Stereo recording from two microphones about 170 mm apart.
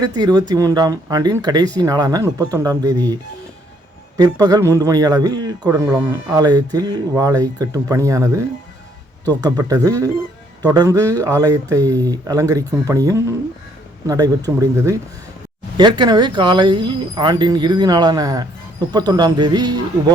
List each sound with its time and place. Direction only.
0.0 s speech: 25° right (ahead or behind)
4.2 s speech: 20° right (ahead or behind)